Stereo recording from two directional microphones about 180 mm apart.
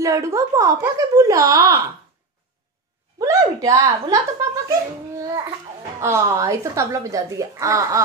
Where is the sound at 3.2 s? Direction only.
20° right (ahead or behind).